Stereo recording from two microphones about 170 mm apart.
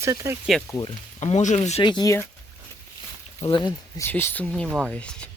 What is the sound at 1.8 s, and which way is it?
Speech, 25° left (ahead or behind).